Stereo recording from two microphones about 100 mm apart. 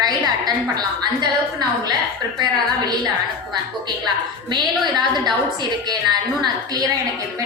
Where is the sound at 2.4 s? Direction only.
40° right (ahead or behind).